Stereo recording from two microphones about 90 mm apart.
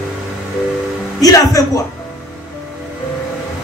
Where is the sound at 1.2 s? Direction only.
40° left (ahead or behind).